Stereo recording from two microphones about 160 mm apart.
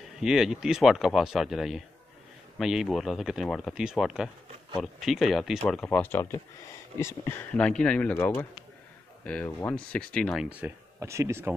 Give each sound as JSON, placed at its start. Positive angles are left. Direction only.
{"t": 0.2, "sound": "speech", "side_deg": -5}
{"t": 10.6, "sound": "speech", "side_deg": -10}